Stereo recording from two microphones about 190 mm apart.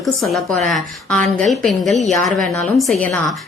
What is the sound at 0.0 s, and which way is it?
A woman's voice, centre (ahead or behind).